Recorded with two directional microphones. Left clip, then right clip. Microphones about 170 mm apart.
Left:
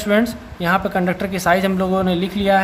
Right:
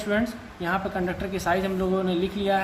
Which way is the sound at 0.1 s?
50° left (ahead or behind).